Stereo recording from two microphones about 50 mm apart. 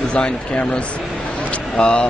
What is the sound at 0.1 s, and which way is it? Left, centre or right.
A man's voice, left.